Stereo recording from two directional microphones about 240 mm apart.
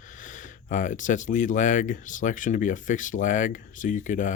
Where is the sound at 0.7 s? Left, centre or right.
Left.